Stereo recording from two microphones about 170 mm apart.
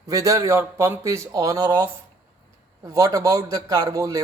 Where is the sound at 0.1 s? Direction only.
20° right (ahead or behind).